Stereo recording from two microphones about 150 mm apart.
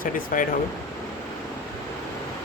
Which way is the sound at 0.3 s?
60° left (ahead or behind).